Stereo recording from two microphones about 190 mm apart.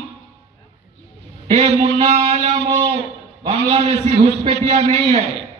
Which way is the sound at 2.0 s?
35° right (ahead or behind).